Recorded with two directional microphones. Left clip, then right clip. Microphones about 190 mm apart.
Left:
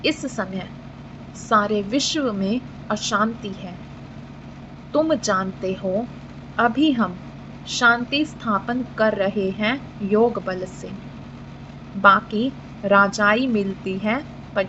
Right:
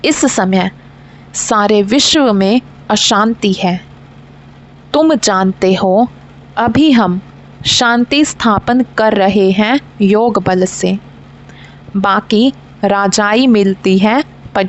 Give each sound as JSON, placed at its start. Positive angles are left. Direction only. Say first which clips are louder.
{"t": 0.0, "sound": "a woman's voice", "louder": "right 12 dB", "side_deg": -70}
{"t": 4.9, "sound": "a woman's voice", "louder": "right 9 dB", "side_deg": -65}
{"t": 12.0, "sound": "a woman's voice", "louder": "right 4 dB", "side_deg": -65}